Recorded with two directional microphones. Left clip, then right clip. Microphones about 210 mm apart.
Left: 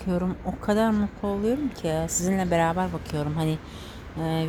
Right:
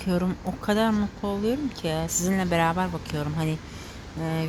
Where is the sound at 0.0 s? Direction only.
Centre (ahead or behind).